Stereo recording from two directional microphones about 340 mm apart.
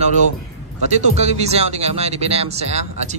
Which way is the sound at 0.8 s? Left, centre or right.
Centre.